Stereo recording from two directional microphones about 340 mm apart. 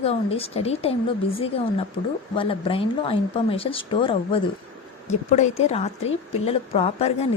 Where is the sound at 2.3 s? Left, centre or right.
Centre.